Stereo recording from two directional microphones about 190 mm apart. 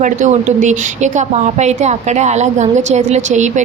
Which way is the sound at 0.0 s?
40° right (ahead or behind).